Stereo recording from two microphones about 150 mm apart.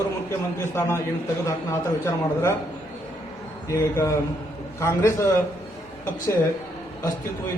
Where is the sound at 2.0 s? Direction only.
15° left (ahead or behind).